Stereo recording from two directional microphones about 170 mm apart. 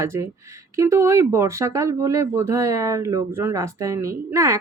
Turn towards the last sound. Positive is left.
turn(degrees=-20)  # may be behind; listen again after turning